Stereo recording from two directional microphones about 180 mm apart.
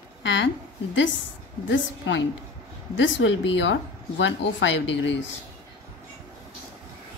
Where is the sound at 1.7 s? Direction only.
90° left.